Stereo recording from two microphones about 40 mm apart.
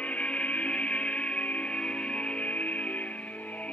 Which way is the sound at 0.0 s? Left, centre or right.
Left.